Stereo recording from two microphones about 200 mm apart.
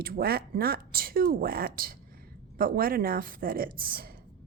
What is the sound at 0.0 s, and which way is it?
A woman's voice, 50° right (ahead or behind).